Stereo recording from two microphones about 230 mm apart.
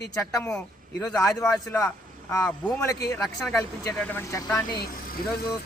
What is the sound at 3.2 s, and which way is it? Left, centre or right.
Speech, centre.